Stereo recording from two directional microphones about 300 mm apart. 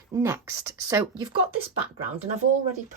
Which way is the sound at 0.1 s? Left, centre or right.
Centre.